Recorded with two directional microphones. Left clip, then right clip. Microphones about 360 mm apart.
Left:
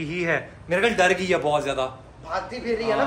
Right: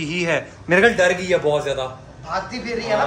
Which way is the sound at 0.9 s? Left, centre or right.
Left.